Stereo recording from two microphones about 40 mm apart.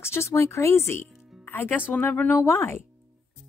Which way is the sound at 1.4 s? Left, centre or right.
Left.